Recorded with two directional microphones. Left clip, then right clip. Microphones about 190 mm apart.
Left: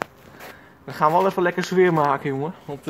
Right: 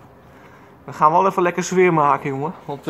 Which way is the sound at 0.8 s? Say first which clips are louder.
Right 4 dB; 25° left (ahead or behind).